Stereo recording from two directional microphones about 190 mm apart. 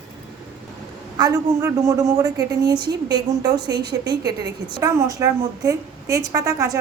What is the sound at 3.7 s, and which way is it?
Speech, 60° right (ahead or behind).